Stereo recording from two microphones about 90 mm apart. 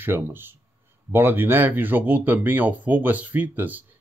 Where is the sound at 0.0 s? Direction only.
25° right (ahead or behind).